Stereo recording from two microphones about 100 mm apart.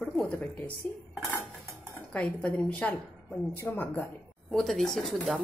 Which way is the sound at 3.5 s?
20° left (ahead or behind).